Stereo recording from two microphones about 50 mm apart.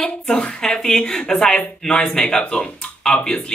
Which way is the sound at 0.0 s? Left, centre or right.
Centre.